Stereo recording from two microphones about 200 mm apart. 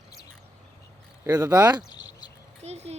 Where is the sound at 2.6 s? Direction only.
35° right (ahead or behind).